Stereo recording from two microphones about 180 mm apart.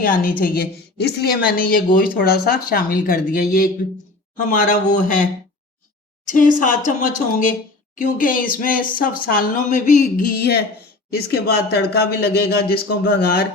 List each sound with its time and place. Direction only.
0.0 s a woman's voice: 50° left (ahead or behind)
6.2 s a woman's voice: 45° left (ahead or behind)
7.9 s a woman's voice: 50° left (ahead or behind)